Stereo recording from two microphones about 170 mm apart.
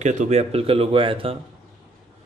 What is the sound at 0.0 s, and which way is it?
Speech, 45° right (ahead or behind).